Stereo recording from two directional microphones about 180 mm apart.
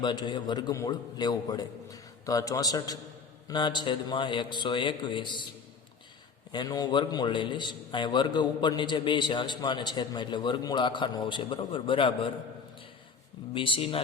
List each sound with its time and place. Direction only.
0.0 s a man's voice: 25° left (ahead or behind)
6.5 s a man's voice: 25° left (ahead or behind)
13.5 s a man's voice: 30° left (ahead or behind)